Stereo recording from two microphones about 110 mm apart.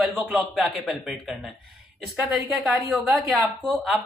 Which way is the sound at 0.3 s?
Centre (ahead or behind).